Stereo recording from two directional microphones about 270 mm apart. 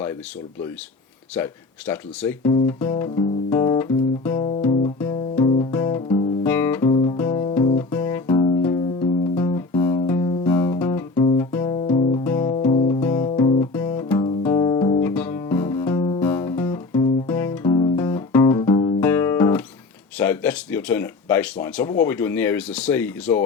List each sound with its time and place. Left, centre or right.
1.4 s guitar: centre
4.9 s music: centre
6.8 s music: centre
15.1 s guitar: centre
20.1 s a sound: centre
22.0 s guitar: centre